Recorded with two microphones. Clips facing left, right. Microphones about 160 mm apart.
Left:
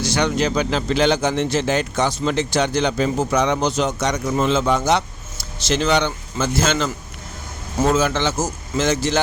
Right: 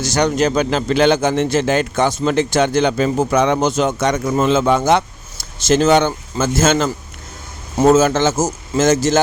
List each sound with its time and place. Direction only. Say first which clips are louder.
0.0 s speech: right 4 dB; 45° right (ahead or behind)